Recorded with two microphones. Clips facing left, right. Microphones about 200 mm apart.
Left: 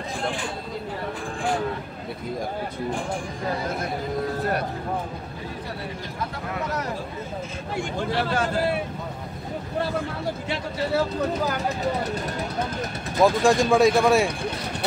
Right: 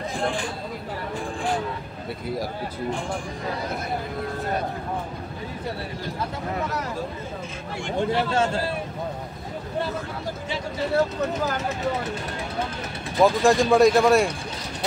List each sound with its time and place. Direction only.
8.0 s a man's voice: 25° right (ahead or behind)
13.2 s speech: centre (ahead or behind)